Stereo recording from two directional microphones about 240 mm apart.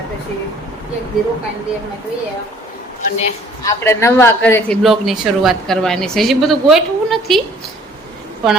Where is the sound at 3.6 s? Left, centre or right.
Centre.